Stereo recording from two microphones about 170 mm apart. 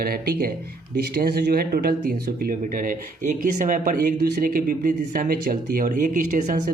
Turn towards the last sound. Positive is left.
turn(degrees=-50)  # may be behind; listen again after turning